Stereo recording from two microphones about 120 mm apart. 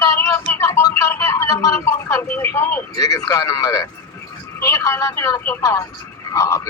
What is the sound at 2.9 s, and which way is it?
A man's voice, 30° left (ahead or behind).